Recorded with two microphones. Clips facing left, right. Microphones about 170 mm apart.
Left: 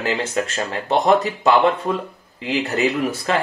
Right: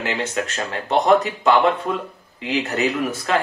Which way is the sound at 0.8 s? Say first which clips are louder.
Even; 35° left (ahead or behind).